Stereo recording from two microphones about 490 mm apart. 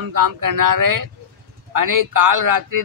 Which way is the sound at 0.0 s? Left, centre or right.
Right.